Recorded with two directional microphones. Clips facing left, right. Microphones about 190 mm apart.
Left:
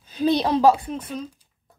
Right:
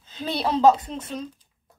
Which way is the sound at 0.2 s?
15° left (ahead or behind).